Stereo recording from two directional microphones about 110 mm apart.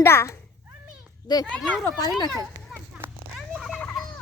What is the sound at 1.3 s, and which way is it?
Speech, 40° left (ahead or behind).